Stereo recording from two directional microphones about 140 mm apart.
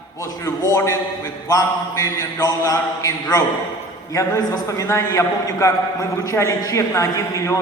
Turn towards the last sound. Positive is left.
turn(degrees=20)  # may be behind; listen again after turning